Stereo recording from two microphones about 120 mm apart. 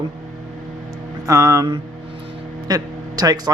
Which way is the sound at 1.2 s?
25° right (ahead or behind).